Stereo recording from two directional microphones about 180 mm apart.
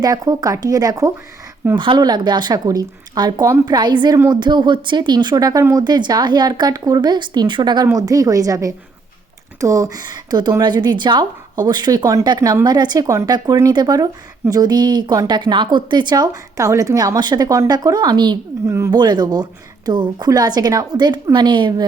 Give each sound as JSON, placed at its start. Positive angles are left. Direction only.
{"t": 0.0, "sound": "speech", "side_deg": -20}